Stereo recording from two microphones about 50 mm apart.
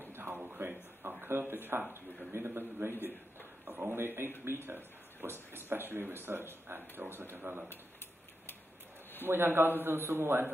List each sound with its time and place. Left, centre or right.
0.0 s a sound: right
1.4 s speech: right
9.2 s speech: right